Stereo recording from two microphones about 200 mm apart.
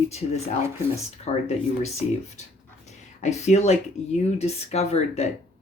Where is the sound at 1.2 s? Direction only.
35° left (ahead or behind).